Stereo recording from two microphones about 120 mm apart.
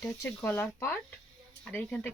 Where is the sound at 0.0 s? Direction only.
20° left (ahead or behind).